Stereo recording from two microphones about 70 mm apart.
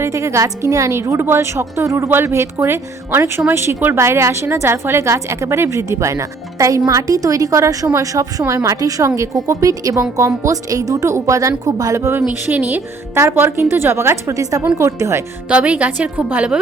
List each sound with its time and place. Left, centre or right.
0.0 s a woman's voice: right
12.5 s a woman's voice: right
13.1 s a woman's voice: right
15.4 s a woman's voice: centre